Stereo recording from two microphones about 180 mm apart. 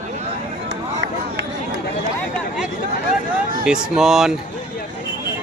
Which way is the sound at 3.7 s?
5° right (ahead or behind).